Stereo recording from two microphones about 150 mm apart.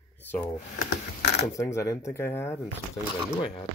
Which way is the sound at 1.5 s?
20° left (ahead or behind).